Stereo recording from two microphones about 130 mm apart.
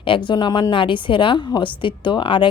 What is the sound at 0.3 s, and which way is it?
A woman's voice, 35° left (ahead or behind).